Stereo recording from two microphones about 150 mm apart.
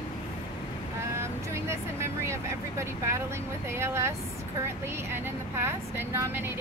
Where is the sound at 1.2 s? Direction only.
15° right (ahead or behind).